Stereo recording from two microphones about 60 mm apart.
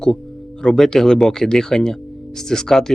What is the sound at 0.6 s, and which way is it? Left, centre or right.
Speech, centre.